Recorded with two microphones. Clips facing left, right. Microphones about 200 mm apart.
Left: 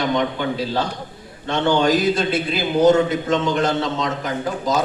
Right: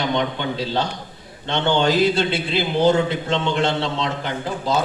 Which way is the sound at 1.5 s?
25° right (ahead or behind).